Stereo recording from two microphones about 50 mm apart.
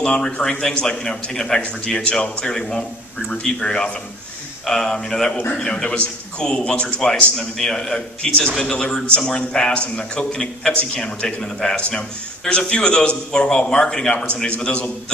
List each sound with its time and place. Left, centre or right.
0.0 s a man's voice: centre
7.3 s a man's voice: centre
14.2 s a man's voice: left